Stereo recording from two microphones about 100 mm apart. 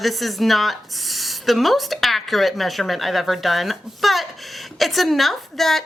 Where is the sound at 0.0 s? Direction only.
Centre (ahead or behind).